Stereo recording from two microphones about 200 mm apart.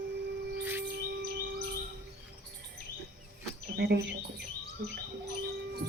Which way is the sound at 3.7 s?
50° right (ahead or behind).